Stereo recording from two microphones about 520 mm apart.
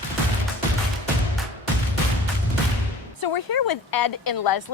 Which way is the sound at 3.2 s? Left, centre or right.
Left.